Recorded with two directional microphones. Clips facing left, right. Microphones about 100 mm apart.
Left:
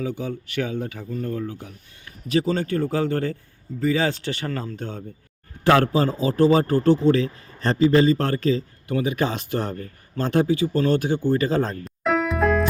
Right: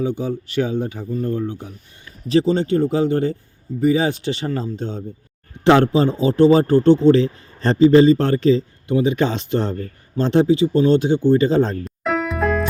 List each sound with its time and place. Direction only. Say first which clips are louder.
0.0 s speech: right 6 dB; 30° right (ahead or behind)
11.9 s music: even; centre (ahead or behind)